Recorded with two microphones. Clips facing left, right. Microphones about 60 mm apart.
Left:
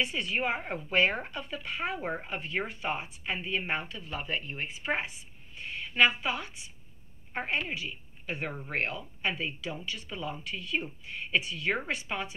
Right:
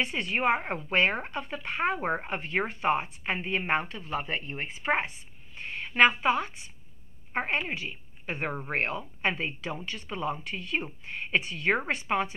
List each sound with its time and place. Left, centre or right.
0.0 s a woman's voice: right